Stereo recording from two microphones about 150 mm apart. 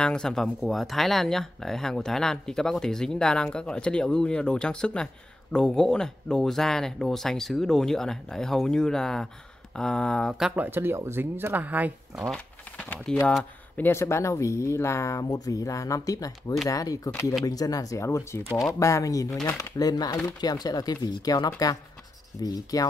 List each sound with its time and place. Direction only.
0.0 s speech: 5° left (ahead or behind)
10.5 s speech: 10° right (ahead or behind)
12.3 s speech: 5° left (ahead or behind); by 22.8 s 25° left (ahead or behind)